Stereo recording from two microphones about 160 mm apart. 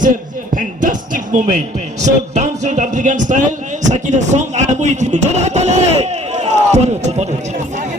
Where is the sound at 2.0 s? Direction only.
50° right (ahead or behind).